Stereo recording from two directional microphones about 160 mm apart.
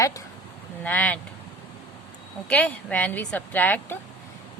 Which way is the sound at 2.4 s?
10° left (ahead or behind).